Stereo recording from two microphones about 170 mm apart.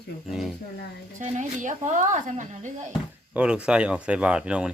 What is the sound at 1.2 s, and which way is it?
Speech, 45° right (ahead or behind).